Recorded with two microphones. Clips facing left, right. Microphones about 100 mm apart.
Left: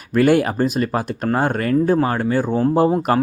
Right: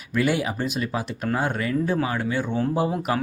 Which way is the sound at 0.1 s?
55° left (ahead or behind).